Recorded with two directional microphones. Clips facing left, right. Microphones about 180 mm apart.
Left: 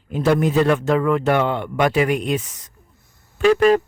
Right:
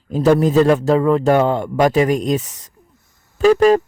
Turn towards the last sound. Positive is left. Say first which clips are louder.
# right 3 dB
turn(degrees=-40)  # may be behind; listen again after turning